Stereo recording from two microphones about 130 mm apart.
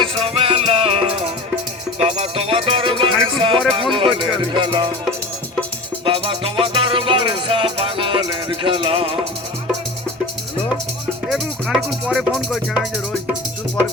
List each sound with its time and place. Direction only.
0.0 s music: 45° right (ahead or behind)
6.1 s music: 45° right (ahead or behind)
11.3 s music: 5° right (ahead or behind)